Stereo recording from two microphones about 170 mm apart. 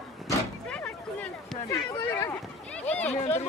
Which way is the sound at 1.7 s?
15° left (ahead or behind).